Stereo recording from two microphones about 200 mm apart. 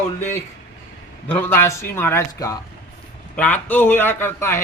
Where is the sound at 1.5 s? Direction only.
10° left (ahead or behind).